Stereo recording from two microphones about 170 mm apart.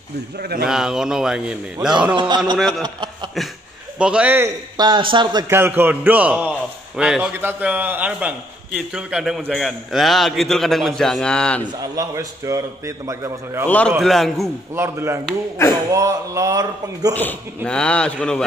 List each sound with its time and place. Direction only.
0.4 s speech: 65° right (ahead or behind)
0.7 s a man's voice: 5° right (ahead or behind)
2.1 s a man's voice: 25° right (ahead or behind)
2.8 s chuckle: 25° right (ahead or behind)
4.0 s a man's voice: 5° right (ahead or behind)
4.7 s a man's voice: 25° right (ahead or behind); by 11.6 s 5° left (ahead or behind)
11.6 s a man's voice: 20° right (ahead or behind)
13.7 s a man's voice: 5° left (ahead or behind)
14.8 s a man's voice: 15° right (ahead or behind)
17.1 s a man's voice: 10° left (ahead or behind)